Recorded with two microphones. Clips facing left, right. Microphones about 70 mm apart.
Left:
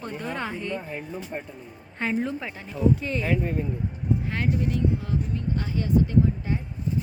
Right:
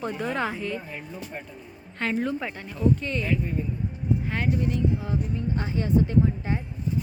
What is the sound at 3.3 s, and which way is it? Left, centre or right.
Speech, left.